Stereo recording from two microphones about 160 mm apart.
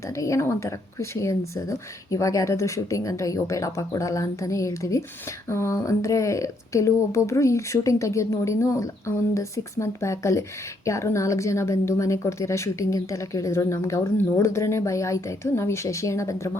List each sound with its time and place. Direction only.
0.0 s a woman's voice: 20° left (ahead or behind)